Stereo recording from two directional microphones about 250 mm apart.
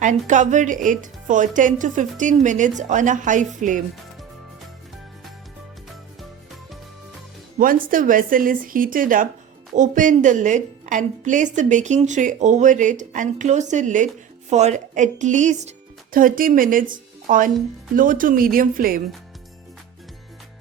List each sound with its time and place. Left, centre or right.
0.3 s speech: right
7.6 s a woman's voice: right